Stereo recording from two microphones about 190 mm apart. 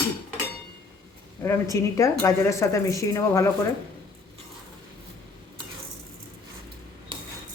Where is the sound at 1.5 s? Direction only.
15° left (ahead or behind).